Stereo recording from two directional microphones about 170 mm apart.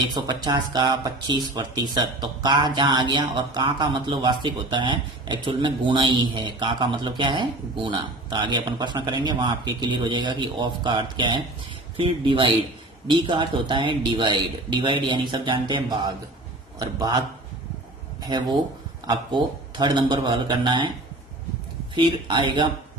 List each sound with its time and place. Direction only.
0.1 s a man's voice: 25° right (ahead or behind)
18.3 s a man's voice: 25° right (ahead or behind)
21.9 s a man's voice: 25° right (ahead or behind)